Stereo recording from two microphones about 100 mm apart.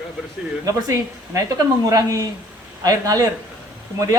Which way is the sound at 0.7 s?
35° right (ahead or behind).